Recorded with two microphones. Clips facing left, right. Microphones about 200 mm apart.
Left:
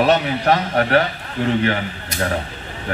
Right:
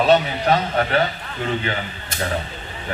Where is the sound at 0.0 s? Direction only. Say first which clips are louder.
Even; 70° left (ahead or behind).